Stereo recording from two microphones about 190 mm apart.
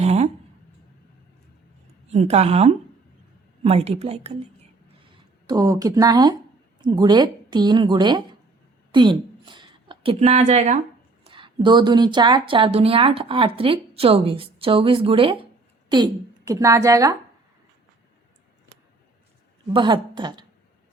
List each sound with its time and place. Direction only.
0.0 s a sound: 35° right (ahead or behind)
2.0 s a woman's voice: 35° right (ahead or behind)
5.5 s a woman's voice: 20° right (ahead or behind); by 10.8 s 40° right (ahead or behind)
11.3 s a woman's voice: 25° right (ahead or behind)
19.7 s a woman's voice: 25° right (ahead or behind)